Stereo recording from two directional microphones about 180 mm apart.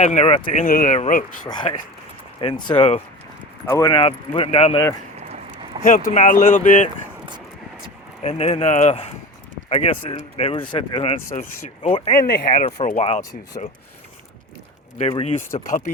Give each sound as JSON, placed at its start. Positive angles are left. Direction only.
{"t": 0.0, "sound": "speech", "side_deg": 40}
{"t": 0.6, "sound": "speech", "side_deg": 50}
{"t": 1.5, "sound": "speech", "side_deg": 25}
{"t": 3.7, "sound": "speech", "side_deg": 20}
{"t": 5.8, "sound": "speech", "side_deg": 45}
{"t": 8.2, "sound": "speech", "side_deg": 35}
{"t": 12.1, "sound": "speech", "side_deg": 55}
{"t": 15.2, "sound": "speech", "side_deg": 35}
{"t": 15.4, "sound": "speech", "side_deg": 45}